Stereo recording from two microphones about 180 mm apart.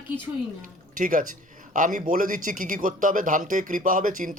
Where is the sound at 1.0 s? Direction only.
50° right (ahead or behind).